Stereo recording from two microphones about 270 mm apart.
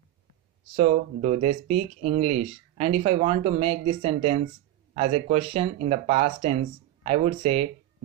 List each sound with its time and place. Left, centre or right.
0.7 s speech: right